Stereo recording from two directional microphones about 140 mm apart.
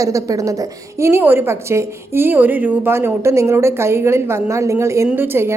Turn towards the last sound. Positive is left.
turn(degrees=-15)  # may be behind; listen again after turning